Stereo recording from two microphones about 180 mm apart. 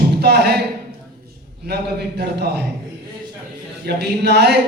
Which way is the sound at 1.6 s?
65° right (ahead or behind).